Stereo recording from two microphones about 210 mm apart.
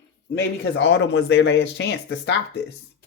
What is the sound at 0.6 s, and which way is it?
Speech, 55° left (ahead or behind).